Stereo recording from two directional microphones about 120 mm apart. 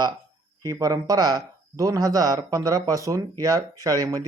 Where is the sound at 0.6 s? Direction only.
30° right (ahead or behind).